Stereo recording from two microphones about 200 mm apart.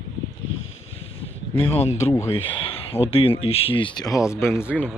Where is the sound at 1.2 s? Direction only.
30° left (ahead or behind).